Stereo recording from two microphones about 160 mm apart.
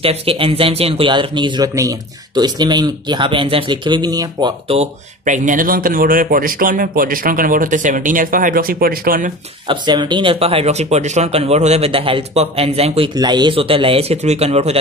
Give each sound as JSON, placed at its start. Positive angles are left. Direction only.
{"t": 0.0, "sound": "a man's voice", "side_deg": -35}
{"t": 5.2, "sound": "speech", "side_deg": -50}
{"t": 9.7, "sound": "a man's voice", "side_deg": -25}
{"t": 13.1, "sound": "a man's voice", "side_deg": -25}